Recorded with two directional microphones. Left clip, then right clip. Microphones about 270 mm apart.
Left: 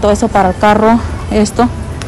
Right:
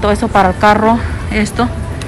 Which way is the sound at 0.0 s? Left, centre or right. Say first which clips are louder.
Left 1 dB; centre.